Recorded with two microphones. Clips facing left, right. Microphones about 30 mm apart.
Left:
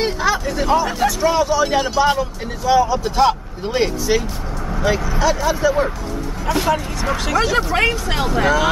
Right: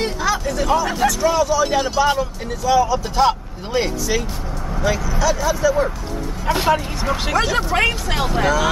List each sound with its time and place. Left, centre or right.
0.0 s speech: centre
2.6 s speech: centre
3.2 s speech: centre
4.6 s vehicle: centre
5.1 s speech: centre
6.4 s speech: centre
7.4 s speech: centre
8.4 s speech: centre